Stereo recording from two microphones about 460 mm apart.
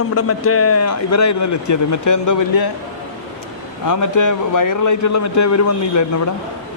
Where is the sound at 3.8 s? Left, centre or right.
Left.